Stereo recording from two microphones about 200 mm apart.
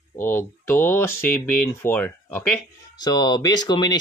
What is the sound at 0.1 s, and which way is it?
Speech, 10° left (ahead or behind).